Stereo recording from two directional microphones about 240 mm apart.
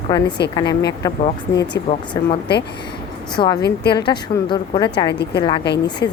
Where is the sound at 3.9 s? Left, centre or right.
Centre.